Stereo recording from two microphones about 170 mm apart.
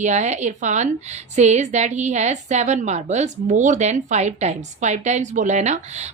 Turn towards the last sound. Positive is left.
turn(degrees=-40)  # may be behind; listen again after turning